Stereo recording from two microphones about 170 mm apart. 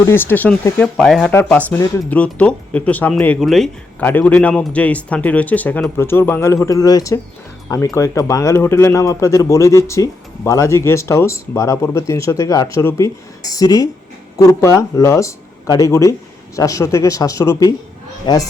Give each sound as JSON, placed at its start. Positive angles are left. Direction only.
{"t": 0.0, "sound": "a man's voice", "side_deg": 15}